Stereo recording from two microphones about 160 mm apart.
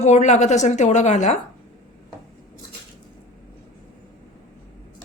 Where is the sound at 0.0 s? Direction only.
45° left (ahead or behind).